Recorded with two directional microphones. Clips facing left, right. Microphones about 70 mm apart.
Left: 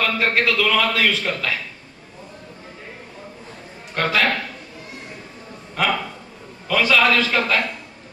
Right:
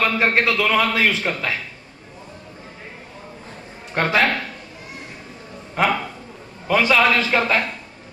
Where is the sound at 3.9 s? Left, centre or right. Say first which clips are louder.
Right 2 dB; right.